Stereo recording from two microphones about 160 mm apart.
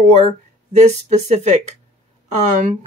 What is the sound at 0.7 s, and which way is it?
Speech, 45° right (ahead or behind).